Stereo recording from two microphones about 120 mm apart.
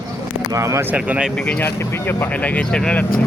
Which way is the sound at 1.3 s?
10° left (ahead or behind).